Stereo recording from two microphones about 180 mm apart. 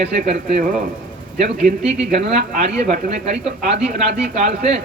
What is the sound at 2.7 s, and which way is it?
Speech, 40° right (ahead or behind).